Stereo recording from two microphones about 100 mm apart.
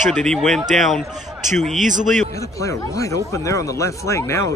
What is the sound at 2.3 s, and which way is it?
Speech, 30° left (ahead or behind).